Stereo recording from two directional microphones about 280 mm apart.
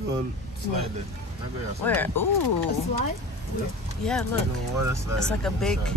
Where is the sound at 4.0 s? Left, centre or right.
Centre.